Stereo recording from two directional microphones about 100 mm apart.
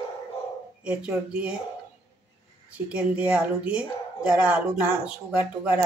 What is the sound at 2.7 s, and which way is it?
Speech, 15° right (ahead or behind).